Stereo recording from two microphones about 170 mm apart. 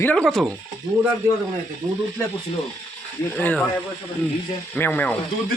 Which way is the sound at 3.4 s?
10° left (ahead or behind).